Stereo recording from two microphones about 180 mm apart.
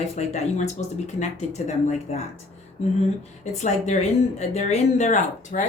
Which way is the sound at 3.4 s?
40° left (ahead or behind).